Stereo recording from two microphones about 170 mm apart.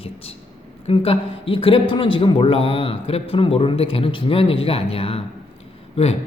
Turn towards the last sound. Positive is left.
turn(degrees=35)  # may be behind; listen again after turning